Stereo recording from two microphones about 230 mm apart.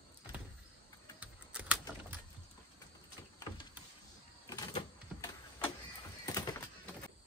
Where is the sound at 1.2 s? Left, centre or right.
Centre.